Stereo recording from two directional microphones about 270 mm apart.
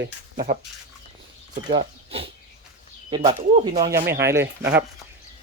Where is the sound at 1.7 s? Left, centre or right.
Centre.